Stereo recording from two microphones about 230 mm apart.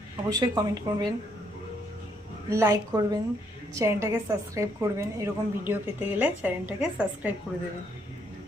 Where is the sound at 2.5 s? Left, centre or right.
Centre.